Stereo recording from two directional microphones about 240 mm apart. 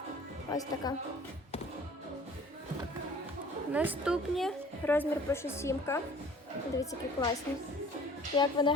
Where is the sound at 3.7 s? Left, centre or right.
Centre.